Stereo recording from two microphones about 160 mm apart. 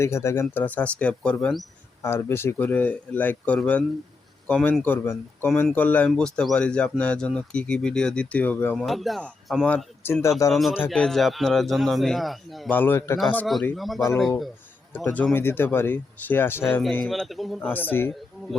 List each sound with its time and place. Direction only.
0.0 s speech: 15° left (ahead or behind)
2.0 s a man's voice: 15° left (ahead or behind)
10.5 s a man's voice: centre (ahead or behind)
12.7 s speech: 15° left (ahead or behind)
13.1 s a man's voice: 5° left (ahead or behind)
14.9 s speech: 10° left (ahead or behind)
17.1 s a man's voice: centre (ahead or behind)